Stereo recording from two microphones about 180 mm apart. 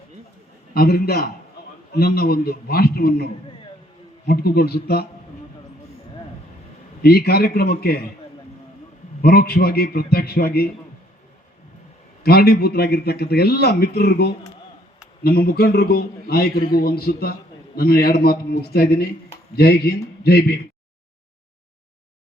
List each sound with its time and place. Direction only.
0.7 s a man's voice: 60° left (ahead or behind)
4.3 s a man's voice: 60° left (ahead or behind)
7.0 s a man's voice: 60° left (ahead or behind)
9.2 s a man's voice: 60° left (ahead or behind)
12.2 s a man's voice: 60° left (ahead or behind)